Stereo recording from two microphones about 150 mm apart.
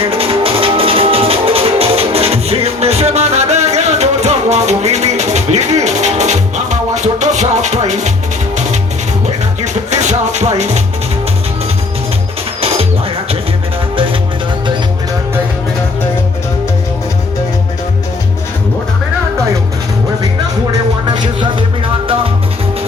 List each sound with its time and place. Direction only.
0.0 s music: 40° right (ahead or behind)
12.6 s bird: 40° right (ahead or behind)
13.9 s music: 35° right (ahead or behind)